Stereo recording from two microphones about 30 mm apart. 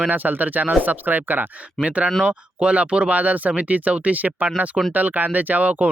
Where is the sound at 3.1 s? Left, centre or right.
Right.